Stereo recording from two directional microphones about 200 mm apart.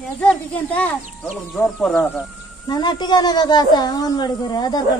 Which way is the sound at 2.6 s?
20° left (ahead or behind).